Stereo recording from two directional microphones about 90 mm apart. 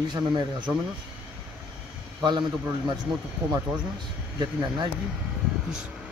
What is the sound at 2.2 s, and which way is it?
Speech, 55° right (ahead or behind).